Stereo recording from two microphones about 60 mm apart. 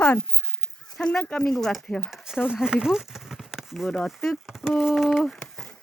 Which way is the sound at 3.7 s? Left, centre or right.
Centre.